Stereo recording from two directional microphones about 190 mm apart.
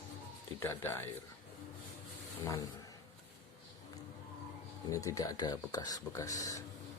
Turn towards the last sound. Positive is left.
turn(degrees=15)  # may be behind; listen again after turning